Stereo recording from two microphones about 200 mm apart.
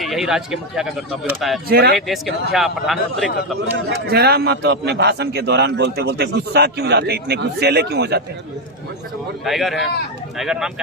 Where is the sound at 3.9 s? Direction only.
55° right (ahead or behind).